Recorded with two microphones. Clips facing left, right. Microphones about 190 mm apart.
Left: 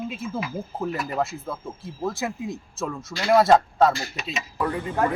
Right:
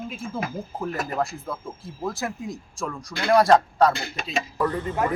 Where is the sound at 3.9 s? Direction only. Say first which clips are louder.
Even; 55° right (ahead or behind).